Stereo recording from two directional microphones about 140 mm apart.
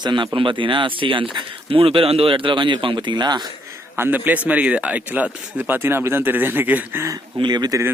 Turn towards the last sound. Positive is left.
turn(degrees=-30)  # may be behind; listen again after turning